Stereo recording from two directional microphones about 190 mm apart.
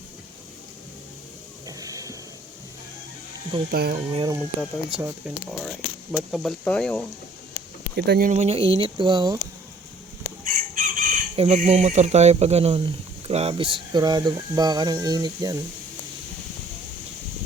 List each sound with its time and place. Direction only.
1.6 s a sound: 20° right (ahead or behind)
3.7 s speech: 55° right (ahead or behind)
3.9 s speech: 30° right (ahead or behind)
4.9 s speech: 5° right (ahead or behind)
7.9 s speech: 60° right (ahead or behind)
8.3 s speech: 35° right (ahead or behind)
10.4 s chicken: 45° right (ahead or behind)
11.3 s speech: 35° right (ahead or behind); by 15.6 s 20° right (ahead or behind)